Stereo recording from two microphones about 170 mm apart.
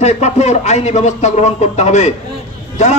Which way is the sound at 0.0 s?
40° left (ahead or behind).